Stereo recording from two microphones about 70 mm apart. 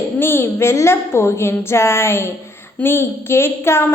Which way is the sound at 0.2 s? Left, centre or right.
Left.